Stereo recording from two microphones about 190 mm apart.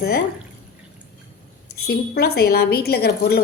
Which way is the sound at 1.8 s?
55° left (ahead or behind).